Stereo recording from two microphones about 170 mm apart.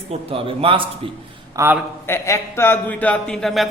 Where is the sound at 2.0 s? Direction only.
15° left (ahead or behind).